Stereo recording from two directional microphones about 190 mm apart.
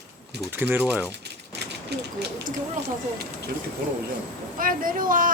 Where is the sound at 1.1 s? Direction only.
60° right (ahead or behind).